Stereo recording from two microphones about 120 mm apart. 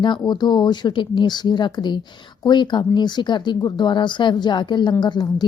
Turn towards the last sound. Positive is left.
turn(degrees=35)  # may be behind; listen again after turning